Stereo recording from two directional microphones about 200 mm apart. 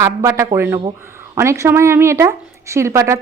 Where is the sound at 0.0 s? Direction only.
15° right (ahead or behind).